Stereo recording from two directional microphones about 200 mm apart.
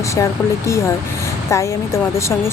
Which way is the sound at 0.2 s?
15° left (ahead or behind).